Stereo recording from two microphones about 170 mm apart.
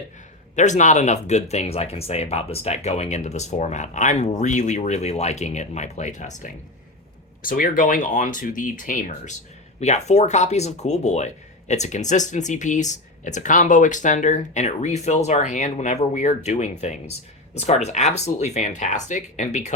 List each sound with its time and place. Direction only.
0.5 s speech: 45° left (ahead or behind)